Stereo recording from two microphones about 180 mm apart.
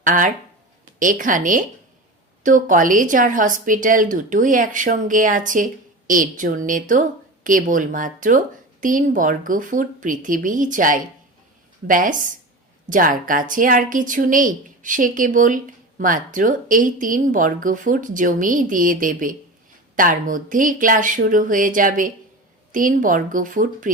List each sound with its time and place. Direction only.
0.0 s a woman's voice: 45° right (ahead or behind)